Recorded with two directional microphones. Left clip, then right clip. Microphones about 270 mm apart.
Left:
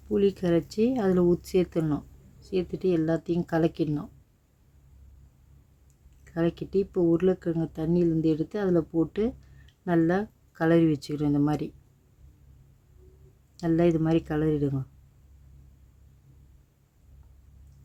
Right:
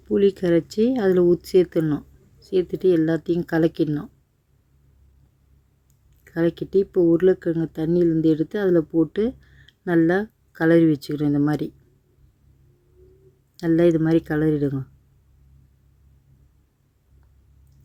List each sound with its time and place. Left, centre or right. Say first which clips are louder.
0.1 s speech: right 6 dB; centre
6.2 s speech: right 6 dB; centre
13.6 s speech: right 6 dB; centre